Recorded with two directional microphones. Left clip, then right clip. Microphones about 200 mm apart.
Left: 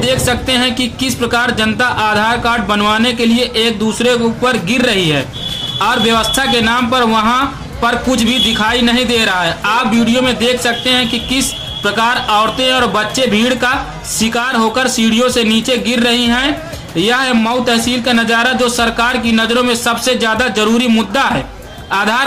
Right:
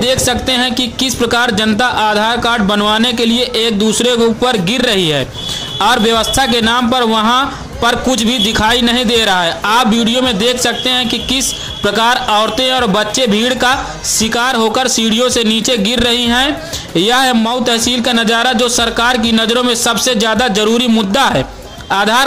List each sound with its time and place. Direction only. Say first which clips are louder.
0.0 s a man's voice: right 1 dB; 35° right (ahead or behind)